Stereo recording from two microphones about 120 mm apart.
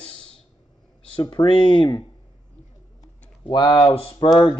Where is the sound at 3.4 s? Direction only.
40° left (ahead or behind).